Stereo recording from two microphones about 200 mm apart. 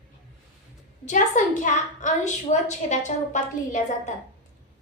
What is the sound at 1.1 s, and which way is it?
A woman's voice, 40° left (ahead or behind).